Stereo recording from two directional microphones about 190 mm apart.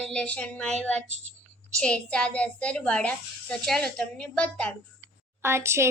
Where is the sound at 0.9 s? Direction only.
35° right (ahead or behind).